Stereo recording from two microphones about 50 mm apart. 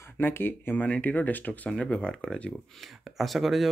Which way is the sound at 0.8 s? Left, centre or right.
Left.